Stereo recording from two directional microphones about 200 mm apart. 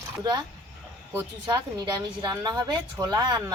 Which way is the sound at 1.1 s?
20° right (ahead or behind).